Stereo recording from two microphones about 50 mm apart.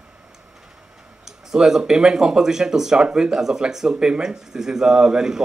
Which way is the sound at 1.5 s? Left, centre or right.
Centre.